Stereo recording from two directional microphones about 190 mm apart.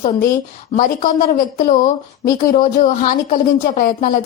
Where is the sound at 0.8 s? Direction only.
45° left (ahead or behind).